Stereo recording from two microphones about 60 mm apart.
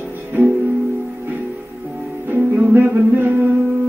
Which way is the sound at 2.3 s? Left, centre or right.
Right.